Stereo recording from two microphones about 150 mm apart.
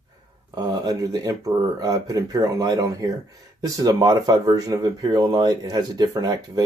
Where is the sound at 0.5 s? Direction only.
25° right (ahead or behind).